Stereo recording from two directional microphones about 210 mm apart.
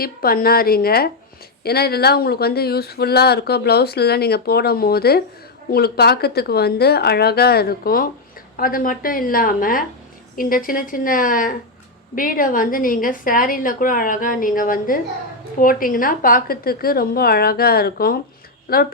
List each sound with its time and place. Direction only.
0.0 s a woman's voice: 45° left (ahead or behind)